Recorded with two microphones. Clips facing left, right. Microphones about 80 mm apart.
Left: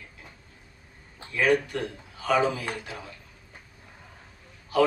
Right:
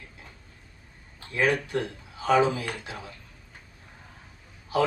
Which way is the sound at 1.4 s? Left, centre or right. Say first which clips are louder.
Left 1 dB; right.